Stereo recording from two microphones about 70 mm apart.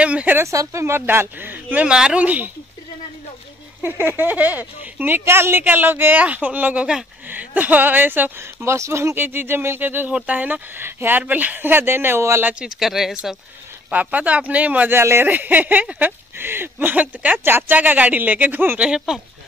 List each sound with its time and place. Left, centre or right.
0.0 s speech: right
0.4 s speech: right
1.9 s speech: centre
3.8 s speech: right
8.5 s speech: right
9.1 s speech: right
12.5 s speech: centre
13.8 s speech: right
15.0 s speech: right
17.4 s speech: right
18.8 s speech: centre